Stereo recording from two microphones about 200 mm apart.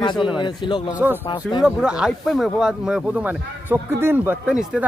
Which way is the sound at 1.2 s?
20° left (ahead or behind).